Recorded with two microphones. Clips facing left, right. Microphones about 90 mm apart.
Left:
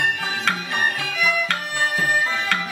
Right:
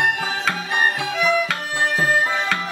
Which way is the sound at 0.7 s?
30° right (ahead or behind).